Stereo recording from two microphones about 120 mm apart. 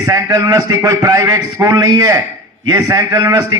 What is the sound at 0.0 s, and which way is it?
A man's voice, 30° right (ahead or behind).